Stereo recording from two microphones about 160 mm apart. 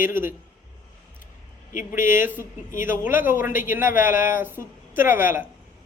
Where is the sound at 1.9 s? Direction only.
55° left (ahead or behind).